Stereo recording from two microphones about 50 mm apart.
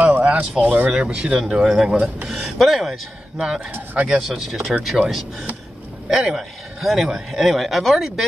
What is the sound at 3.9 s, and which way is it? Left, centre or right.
Speech, right.